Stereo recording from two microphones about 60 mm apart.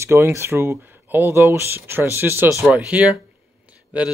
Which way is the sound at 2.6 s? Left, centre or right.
Right.